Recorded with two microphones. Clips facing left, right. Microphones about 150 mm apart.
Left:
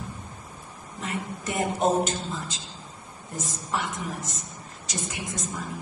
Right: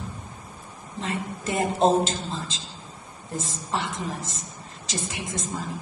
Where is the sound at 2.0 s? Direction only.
90° right.